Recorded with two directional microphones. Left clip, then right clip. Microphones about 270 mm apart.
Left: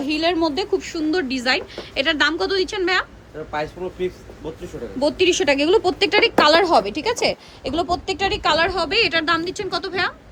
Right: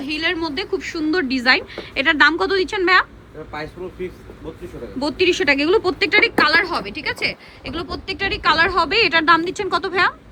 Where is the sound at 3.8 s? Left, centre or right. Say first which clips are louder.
Left 2 dB; left.